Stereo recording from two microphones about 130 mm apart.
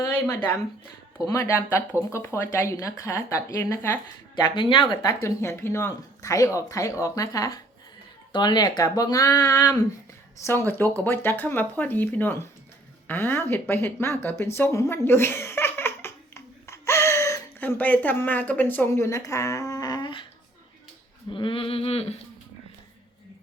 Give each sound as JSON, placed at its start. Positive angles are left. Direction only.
{"t": 1.3, "sound": "speech", "side_deg": 20}
{"t": 4.4, "sound": "speech", "side_deg": 40}
{"t": 5.0, "sound": "speech", "side_deg": 20}
{"t": 13.1, "sound": "a sound", "side_deg": 15}
{"t": 17.6, "sound": "speech", "side_deg": 10}
{"t": 21.2, "sound": "a sound", "side_deg": 40}